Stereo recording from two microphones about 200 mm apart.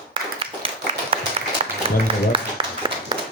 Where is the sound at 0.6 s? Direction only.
25° right (ahead or behind).